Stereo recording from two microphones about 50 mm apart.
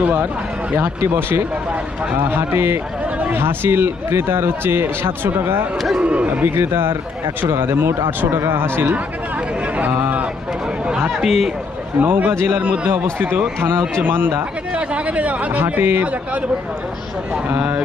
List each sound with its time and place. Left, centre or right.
0.8 s speech: right
2.1 s a man's voice: right
6.0 s speech: right
6.4 s a man's voice: right
10.9 s speech: centre
11.9 s a man's voice: right
14.8 s speech: right
15.5 s a man's voice: right
17.6 s mantra: right